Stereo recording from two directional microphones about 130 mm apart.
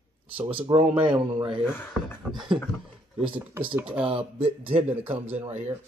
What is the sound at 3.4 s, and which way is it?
Speech, 15° right (ahead or behind).